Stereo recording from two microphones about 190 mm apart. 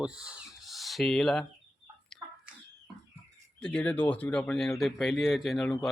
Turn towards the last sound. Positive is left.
turn(degrees=0)  # may be behind; listen again after turning